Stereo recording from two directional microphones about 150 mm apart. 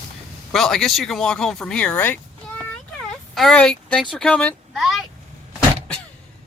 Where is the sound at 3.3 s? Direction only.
Centre (ahead or behind).